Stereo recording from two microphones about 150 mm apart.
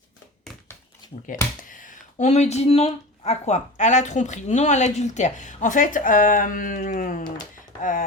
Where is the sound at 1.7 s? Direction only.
60° left (ahead or behind).